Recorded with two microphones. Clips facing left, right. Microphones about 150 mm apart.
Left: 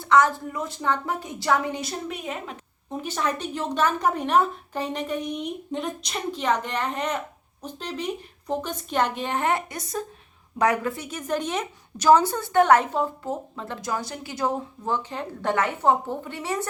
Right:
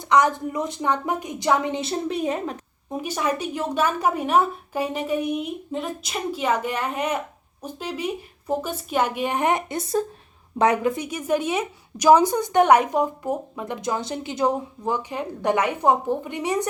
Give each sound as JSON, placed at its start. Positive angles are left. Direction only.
{"t": 0.0, "sound": "a woman's voice", "side_deg": -15}
{"t": 2.9, "sound": "a woman's voice", "side_deg": -10}